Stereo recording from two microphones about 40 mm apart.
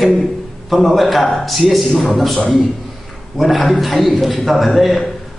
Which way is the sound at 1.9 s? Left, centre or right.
Left.